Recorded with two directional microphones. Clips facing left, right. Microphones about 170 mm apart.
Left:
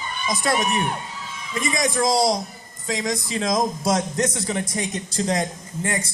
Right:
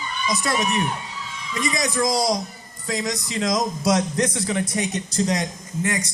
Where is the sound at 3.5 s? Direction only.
50° left (ahead or behind).